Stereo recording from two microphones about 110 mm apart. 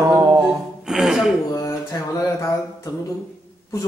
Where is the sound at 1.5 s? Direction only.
30° left (ahead or behind).